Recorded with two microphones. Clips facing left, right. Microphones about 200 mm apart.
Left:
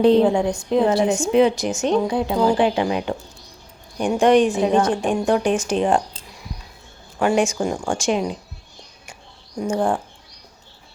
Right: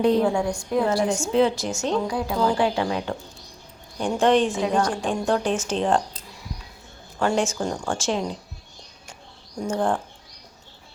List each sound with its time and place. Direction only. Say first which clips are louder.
0.0 s a woman's voice: left 5 dB; 25° left (ahead or behind)
7.2 s a woman's voice: left 4 dB; 15° left (ahead or behind)
9.6 s a woman's voice: left 3 dB; 10° left (ahead or behind)